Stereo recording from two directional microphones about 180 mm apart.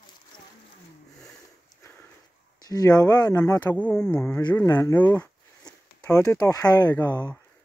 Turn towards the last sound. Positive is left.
turn(degrees=10)  # may be behind; listen again after turning